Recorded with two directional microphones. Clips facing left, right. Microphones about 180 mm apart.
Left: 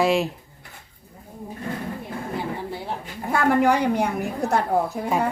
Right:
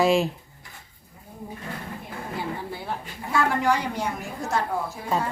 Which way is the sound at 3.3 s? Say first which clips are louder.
Left 4 dB; 55° left (ahead or behind).